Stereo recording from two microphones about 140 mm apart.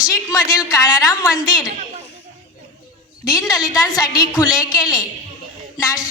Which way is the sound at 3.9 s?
25° left (ahead or behind).